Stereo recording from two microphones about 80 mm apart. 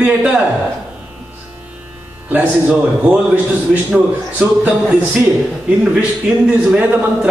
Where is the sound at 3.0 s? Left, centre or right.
Centre.